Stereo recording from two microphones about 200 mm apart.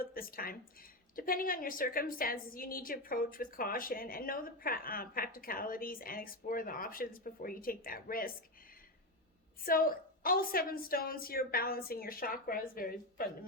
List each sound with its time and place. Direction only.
0.0 s a woman's voice: 45° left (ahead or behind)
9.6 s a woman's voice: 45° left (ahead or behind)